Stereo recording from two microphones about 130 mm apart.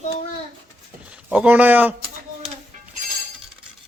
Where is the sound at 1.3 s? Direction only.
10° right (ahead or behind).